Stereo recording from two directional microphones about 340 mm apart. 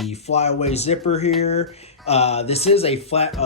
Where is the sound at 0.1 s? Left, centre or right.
Centre.